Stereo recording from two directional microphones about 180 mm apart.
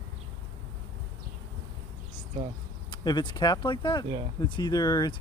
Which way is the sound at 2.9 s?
25° left (ahead or behind).